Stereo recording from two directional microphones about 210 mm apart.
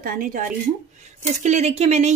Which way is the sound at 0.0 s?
40° right (ahead or behind).